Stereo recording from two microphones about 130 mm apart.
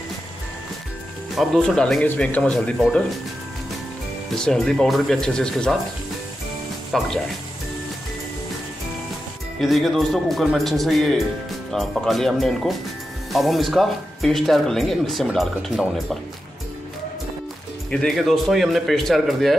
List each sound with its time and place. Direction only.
1.3 s speech: centre (ahead or behind)
4.5 s speech: 5° left (ahead or behind)
6.9 s speech: centre (ahead or behind)
9.6 s speech: centre (ahead or behind)
17.9 s speech: centre (ahead or behind)